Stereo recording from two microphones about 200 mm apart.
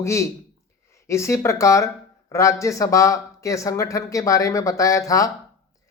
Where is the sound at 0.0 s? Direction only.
15° left (ahead or behind).